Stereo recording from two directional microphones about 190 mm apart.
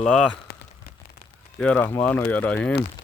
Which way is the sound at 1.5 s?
5° left (ahead or behind).